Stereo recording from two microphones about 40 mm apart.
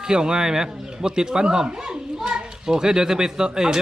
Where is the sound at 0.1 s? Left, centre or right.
Centre.